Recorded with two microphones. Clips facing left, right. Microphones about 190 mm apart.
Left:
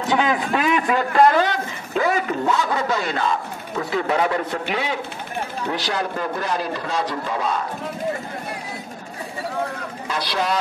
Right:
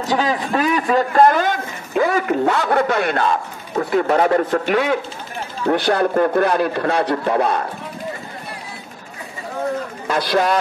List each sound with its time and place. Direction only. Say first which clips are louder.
0.0 s a man's voice: right 1 dB; 35° right (ahead or behind); by 7.6 s 60° right (ahead or behind)
10.0 s a man's voice: right 6 dB; 50° right (ahead or behind)